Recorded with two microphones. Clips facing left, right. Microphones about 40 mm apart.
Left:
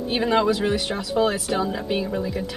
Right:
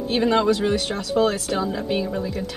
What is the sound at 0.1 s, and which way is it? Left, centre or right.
Speech, centre.